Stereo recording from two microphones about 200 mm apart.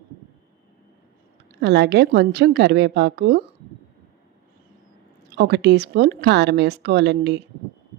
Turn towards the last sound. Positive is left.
turn(degrees=-55)  # may be behind; listen again after turning